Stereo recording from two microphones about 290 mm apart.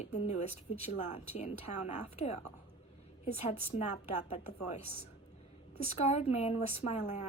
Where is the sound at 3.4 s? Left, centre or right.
Left.